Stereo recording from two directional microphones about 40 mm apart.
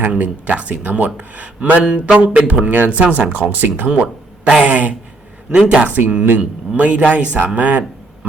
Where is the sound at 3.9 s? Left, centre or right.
Right.